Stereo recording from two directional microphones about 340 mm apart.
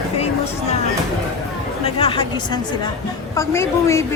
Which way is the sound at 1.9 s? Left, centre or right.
Centre.